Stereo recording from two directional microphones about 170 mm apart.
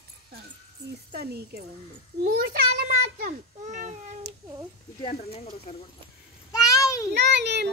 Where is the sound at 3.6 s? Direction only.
45° right (ahead or behind).